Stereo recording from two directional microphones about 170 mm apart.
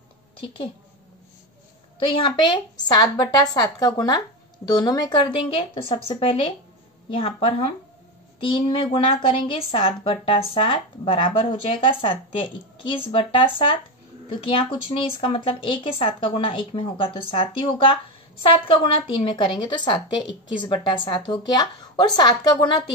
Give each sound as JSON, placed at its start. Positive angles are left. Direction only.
{"t": 0.4, "sound": "a woman's voice", "side_deg": 30}
{"t": 2.1, "sound": "a woman's voice", "side_deg": 30}